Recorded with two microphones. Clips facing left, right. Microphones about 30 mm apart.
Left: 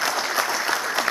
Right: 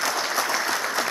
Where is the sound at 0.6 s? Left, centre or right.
Centre.